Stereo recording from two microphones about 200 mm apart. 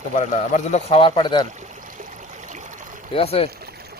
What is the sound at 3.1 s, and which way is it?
Speech, 30° left (ahead or behind).